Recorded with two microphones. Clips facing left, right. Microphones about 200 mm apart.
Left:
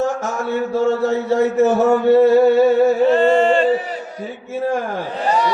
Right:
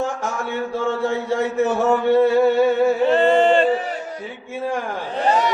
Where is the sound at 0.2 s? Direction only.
40° left (ahead or behind).